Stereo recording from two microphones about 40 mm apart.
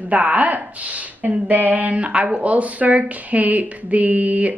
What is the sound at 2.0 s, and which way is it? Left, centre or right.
Speech, right.